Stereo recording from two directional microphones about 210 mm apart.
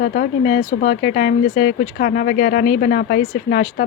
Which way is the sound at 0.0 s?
45° left (ahead or behind).